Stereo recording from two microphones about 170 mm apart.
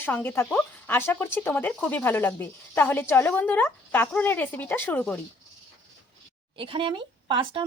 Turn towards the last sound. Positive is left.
turn(degrees=-30)  # may be behind; listen again after turning